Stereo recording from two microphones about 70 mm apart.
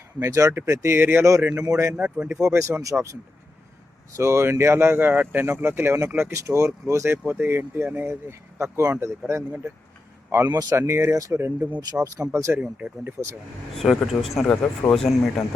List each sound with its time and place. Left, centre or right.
0.2 s speech: right
1.6 s speech: right
2.0 s speech: centre
2.4 s speech: right
4.2 s speech: right
6.3 s speech: right
10.5 s speech: right
10.8 s speech: right
11.1 s speech: right
11.3 s speech: right
11.8 s speech: right
12.5 s speech: centre
13.2 s speech: right
13.7 s speech: centre